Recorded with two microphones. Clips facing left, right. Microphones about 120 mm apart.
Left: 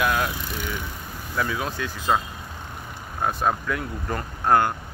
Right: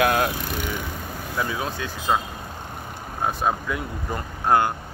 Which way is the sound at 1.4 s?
20° right (ahead or behind).